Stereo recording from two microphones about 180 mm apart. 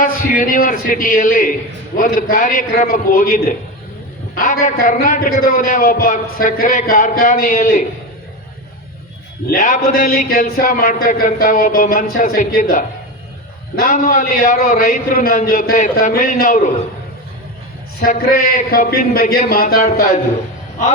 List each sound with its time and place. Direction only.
0.0 s a man's voice: 50° left (ahead or behind)
9.5 s a man's voice: 45° left (ahead or behind)
18.0 s a man's voice: 50° left (ahead or behind)